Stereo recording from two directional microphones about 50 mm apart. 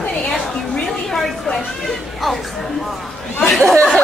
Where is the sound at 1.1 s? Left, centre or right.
Centre.